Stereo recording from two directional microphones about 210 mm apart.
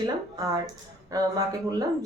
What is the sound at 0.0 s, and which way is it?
Speech, 15° right (ahead or behind).